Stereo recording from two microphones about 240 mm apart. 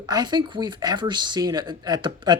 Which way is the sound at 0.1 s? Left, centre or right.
Centre.